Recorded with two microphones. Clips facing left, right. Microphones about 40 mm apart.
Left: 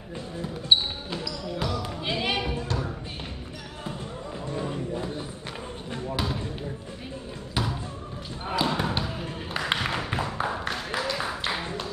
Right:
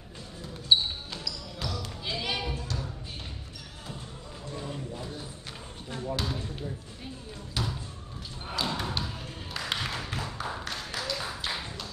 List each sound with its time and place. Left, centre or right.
1.1 s basketball bounce: centre
4.6 s a sound: left
6.1 s basketball bounce: centre
7.6 s basketball bounce: centre